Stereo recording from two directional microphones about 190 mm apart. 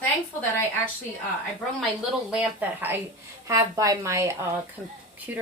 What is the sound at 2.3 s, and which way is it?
Speech, 10° right (ahead or behind).